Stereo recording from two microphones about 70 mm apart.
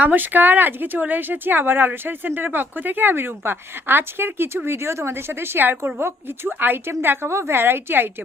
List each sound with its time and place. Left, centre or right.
0.0 s speech: right